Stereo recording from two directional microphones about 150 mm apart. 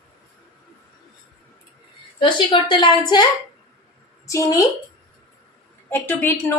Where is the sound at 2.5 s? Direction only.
30° left (ahead or behind).